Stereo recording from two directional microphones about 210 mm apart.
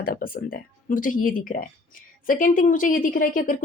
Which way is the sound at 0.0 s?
45° left (ahead or behind).